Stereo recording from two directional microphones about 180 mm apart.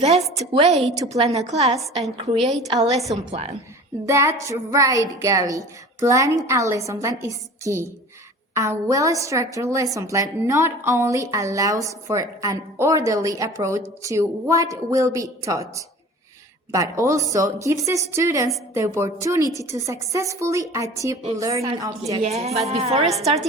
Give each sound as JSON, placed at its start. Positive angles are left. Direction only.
{"t": 0.3, "sound": "a woman's voice", "side_deg": -35}
{"t": 3.0, "sound": "a woman's voice", "side_deg": 0}
{"t": 4.0, "sound": "a woman's voice", "side_deg": -15}
{"t": 22.2, "sound": "a woman's voice", "side_deg": -35}